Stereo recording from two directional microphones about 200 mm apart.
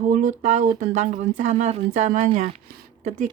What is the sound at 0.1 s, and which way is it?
Speech, 40° right (ahead or behind).